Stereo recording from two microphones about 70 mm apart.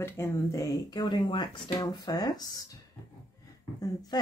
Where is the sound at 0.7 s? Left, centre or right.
Left.